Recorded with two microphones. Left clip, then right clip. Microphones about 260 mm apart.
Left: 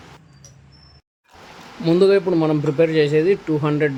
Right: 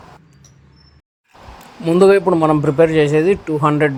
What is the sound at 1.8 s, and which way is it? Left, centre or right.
Speech, centre.